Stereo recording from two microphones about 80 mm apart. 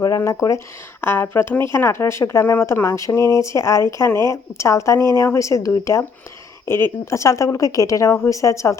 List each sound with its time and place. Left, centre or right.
0.2 s speech: left
1.0 s speech: left
6.7 s speech: left